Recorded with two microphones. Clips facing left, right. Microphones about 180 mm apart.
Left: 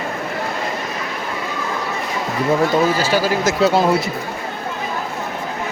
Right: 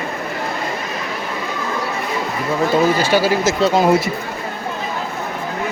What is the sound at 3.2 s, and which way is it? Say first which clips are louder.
Speech: right 2 dB; 10° right (ahead or behind).